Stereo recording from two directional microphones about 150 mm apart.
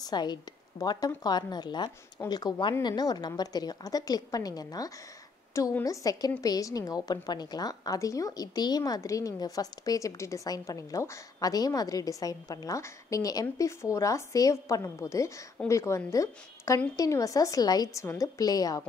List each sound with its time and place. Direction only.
0.0 s a woman's voice: 30° left (ahead or behind)